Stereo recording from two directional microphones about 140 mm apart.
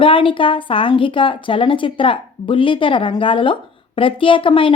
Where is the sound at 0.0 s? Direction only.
40° left (ahead or behind).